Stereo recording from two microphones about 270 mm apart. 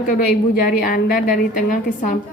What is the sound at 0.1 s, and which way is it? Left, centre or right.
A woman's voice, left.